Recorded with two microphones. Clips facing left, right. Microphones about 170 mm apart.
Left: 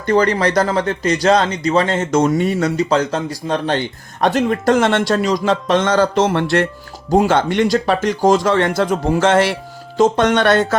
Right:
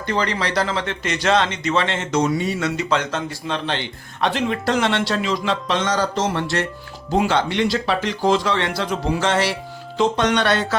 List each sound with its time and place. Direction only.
0.0 s speech: 45° left (ahead or behind)
7.1 s speech: 45° left (ahead or behind)